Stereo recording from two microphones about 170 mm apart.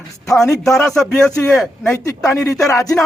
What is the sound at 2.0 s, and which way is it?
Speech, 20° left (ahead or behind).